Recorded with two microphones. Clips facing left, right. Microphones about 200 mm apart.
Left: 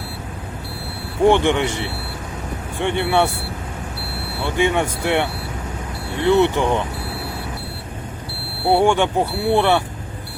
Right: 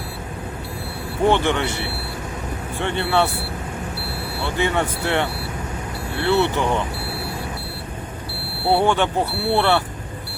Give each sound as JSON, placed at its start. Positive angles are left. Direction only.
{"t": 1.2, "sound": "speech", "side_deg": 15}
{"t": 4.4, "sound": "speech", "side_deg": 15}
{"t": 8.6, "sound": "speech", "side_deg": 15}